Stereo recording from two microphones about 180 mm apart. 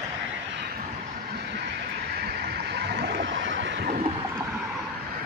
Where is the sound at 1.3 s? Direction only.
70° right (ahead or behind).